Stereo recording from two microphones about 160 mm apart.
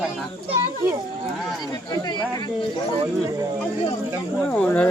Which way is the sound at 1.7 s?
25° left (ahead or behind).